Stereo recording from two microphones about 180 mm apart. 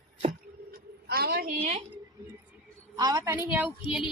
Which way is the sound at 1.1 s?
60° right (ahead or behind).